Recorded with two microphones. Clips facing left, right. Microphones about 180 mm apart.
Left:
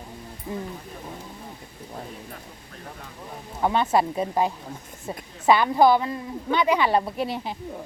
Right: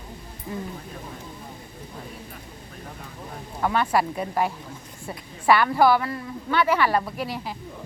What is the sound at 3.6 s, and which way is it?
A woman's voice, 20° left (ahead or behind).